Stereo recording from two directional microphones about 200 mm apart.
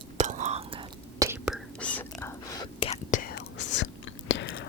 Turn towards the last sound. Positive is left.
turn(degrees=65)  # may be behind; listen again after turning